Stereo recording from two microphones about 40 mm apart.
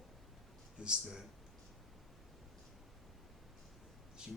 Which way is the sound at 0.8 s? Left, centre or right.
Right.